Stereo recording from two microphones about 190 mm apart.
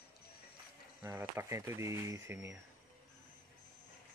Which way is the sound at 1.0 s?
10° right (ahead or behind).